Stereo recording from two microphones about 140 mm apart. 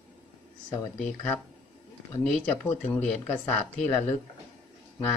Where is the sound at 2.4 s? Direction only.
10° left (ahead or behind).